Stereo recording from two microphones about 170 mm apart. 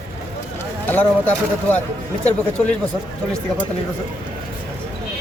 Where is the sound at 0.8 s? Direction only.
10° left (ahead or behind).